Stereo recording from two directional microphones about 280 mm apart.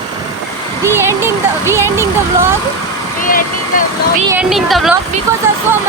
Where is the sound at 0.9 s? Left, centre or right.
Centre.